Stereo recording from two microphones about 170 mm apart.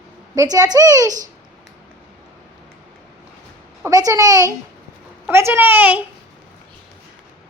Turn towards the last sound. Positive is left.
turn(degrees=-10)  # may be behind; listen again after turning